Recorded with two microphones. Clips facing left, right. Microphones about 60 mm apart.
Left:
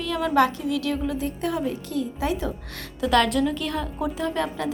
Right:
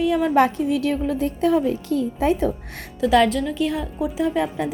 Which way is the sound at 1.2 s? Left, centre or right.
Right.